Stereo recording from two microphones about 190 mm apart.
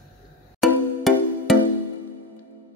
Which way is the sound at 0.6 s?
Centre (ahead or behind).